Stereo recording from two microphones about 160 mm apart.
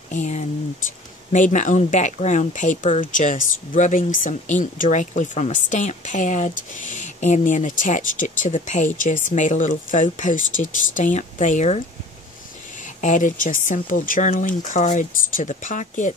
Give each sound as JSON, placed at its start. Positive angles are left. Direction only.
{"t": 0.1, "sound": "speech", "side_deg": 45}
{"t": 12.8, "sound": "speech", "side_deg": 50}